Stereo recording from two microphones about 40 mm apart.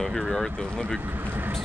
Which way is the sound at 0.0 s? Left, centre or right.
Centre.